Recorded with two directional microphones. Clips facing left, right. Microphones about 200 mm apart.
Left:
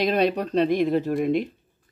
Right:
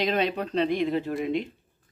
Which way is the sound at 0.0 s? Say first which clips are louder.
Left 4 dB; 40° left (ahead or behind).